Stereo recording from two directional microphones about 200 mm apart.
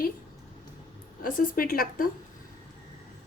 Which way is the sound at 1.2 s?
45° left (ahead or behind).